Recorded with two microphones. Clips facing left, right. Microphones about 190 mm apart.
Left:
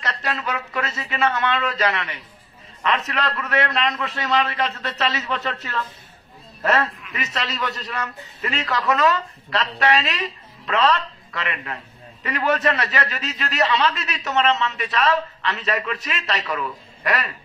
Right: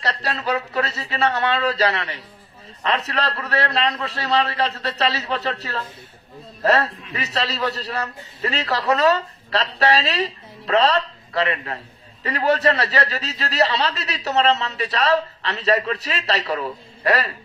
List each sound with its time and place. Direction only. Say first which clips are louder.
0.0 s a man's voice: right 2 dB; 35° right (ahead or behind)